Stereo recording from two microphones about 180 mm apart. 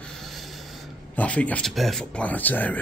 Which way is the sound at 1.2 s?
10° left (ahead or behind).